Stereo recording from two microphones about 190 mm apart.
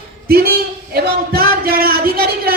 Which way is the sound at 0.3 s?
55° right (ahead or behind).